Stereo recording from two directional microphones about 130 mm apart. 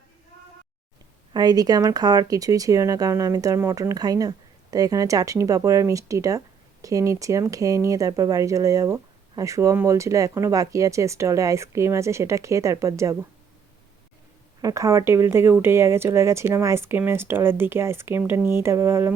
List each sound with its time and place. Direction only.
1.3 s speech: 30° right (ahead or behind)
14.6 s speech: 25° right (ahead or behind)